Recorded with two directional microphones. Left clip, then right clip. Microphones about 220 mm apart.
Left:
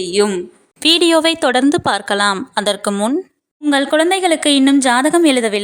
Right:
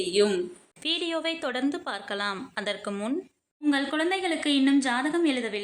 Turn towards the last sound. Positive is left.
turn(degrees=45)  # may be behind; listen again after turning